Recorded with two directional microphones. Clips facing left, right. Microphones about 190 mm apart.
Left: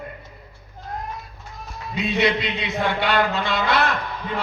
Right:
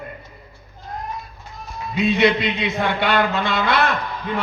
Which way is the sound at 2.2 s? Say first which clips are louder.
Right 2 dB; 55° right (ahead or behind).